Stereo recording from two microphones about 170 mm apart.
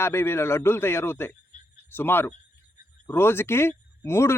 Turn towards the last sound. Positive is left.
turn(degrees=15)  # may be behind; listen again after turning